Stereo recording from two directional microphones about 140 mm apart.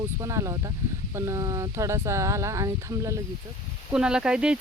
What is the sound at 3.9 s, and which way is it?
Speech, 5° right (ahead or behind).